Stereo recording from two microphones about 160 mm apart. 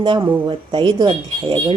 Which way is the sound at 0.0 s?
30° right (ahead or behind).